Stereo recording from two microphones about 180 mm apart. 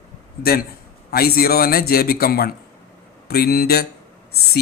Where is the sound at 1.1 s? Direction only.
60° left (ahead or behind).